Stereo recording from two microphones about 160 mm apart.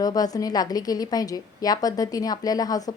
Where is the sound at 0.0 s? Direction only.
25° left (ahead or behind).